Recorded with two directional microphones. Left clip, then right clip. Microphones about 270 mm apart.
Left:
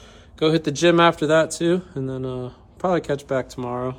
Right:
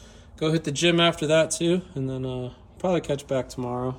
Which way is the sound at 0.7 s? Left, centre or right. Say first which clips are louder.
Left 4 dB; centre.